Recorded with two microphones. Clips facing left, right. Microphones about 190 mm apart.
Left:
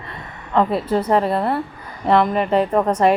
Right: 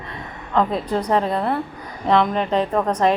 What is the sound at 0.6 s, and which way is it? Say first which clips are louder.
A woman's voice: left 2 dB; 5° left (ahead or behind).